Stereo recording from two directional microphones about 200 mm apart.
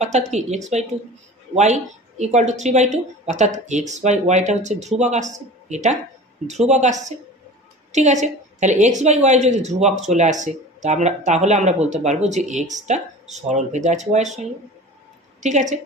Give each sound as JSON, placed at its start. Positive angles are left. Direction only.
{"t": 0.0, "sound": "speech", "side_deg": -35}
{"t": 15.4, "sound": "speech", "side_deg": -35}